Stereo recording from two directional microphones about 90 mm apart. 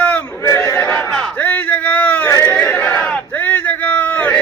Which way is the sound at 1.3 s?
20° left (ahead or behind).